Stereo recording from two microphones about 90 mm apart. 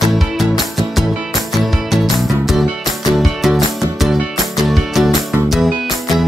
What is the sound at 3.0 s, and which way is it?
Music, centre (ahead or behind).